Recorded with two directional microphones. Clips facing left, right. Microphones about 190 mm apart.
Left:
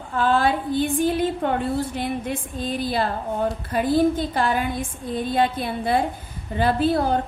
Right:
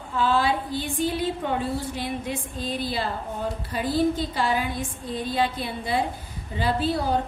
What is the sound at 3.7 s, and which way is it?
A woman's voice, 50° left (ahead or behind).